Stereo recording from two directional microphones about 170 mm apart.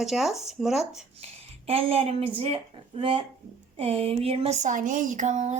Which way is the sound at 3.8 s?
35° right (ahead or behind).